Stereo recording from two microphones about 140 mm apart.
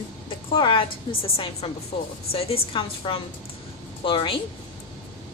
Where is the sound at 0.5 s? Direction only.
35° left (ahead or behind).